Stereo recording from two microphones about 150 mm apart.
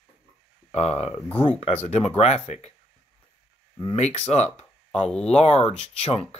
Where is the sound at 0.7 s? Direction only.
45° left (ahead or behind).